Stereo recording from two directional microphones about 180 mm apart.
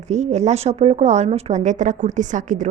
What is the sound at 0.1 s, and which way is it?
A woman's voice, 40° right (ahead or behind).